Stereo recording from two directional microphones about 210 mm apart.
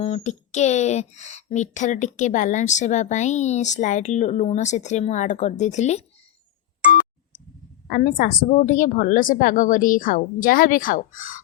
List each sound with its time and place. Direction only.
0.0 s speech: 30° left (ahead or behind)
7.9 s speech: 40° left (ahead or behind)